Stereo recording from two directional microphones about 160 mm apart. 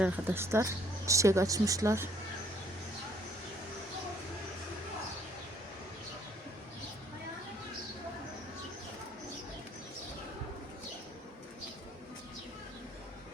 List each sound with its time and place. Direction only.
0.0 s speech: 15° right (ahead or behind)